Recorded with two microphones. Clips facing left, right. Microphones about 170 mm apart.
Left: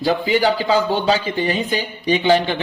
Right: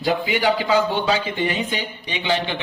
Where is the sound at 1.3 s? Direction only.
35° left (ahead or behind).